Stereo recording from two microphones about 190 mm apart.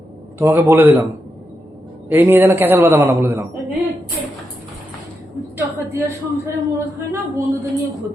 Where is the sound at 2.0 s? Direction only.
10° right (ahead or behind).